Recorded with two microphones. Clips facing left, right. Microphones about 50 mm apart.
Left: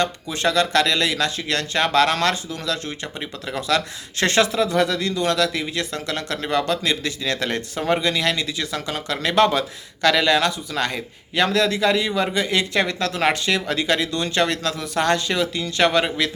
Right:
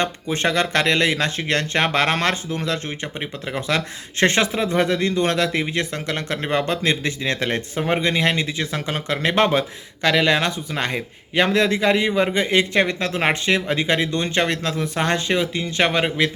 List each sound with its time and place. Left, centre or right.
0.0 s speech: right